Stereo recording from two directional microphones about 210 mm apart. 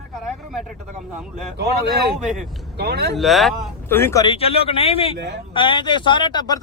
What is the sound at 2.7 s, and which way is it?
Speech, 50° right (ahead or behind).